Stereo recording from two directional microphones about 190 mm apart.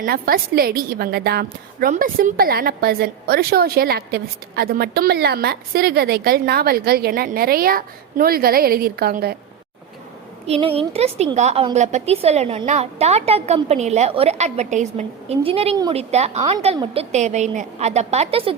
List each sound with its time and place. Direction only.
0.0 s a woman's voice: 50° right (ahead or behind)
1.9 s a woman's voice: 45° right (ahead or behind)
10.4 s a woman's voice: 30° right (ahead or behind)